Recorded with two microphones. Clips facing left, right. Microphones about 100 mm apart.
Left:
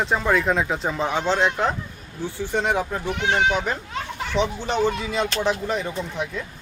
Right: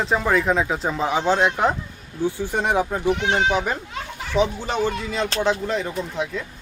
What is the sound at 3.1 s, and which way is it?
Speech, 25° right (ahead or behind).